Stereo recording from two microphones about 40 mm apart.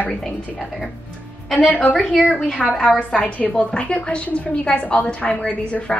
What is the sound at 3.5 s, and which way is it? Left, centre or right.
A woman's voice, left.